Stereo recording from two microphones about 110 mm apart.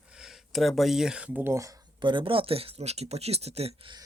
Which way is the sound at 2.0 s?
50° right (ahead or behind).